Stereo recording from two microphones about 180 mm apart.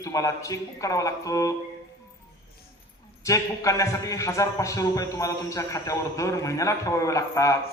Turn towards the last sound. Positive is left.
turn(degrees=15)  # may be behind; listen again after turning